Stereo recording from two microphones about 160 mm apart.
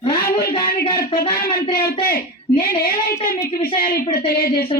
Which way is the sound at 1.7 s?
65° left (ahead or behind).